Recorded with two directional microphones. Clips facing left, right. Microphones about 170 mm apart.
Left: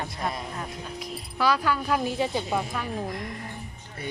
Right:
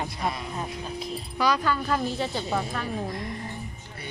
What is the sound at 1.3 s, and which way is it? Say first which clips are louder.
A woman's voice: even; 5° left (ahead or behind).